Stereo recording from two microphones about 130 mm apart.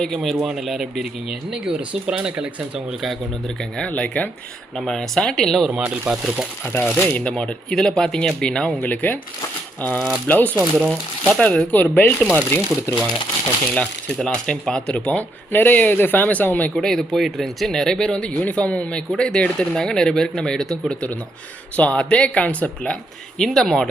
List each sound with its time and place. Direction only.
0.0 s speech: centre (ahead or behind)
3.6 s speech: 10° left (ahead or behind); by 6.4 s 10° right (ahead or behind)
6.9 s speech: 15° left (ahead or behind)
7.3 s speech: 5° left (ahead or behind)
10.6 s speech: 5° right (ahead or behind)
11.3 s speech: 10° left (ahead or behind)
13.7 s speech: 5° left (ahead or behind)